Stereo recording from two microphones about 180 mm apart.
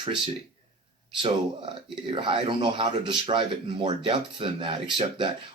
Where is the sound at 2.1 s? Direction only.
30° right (ahead or behind).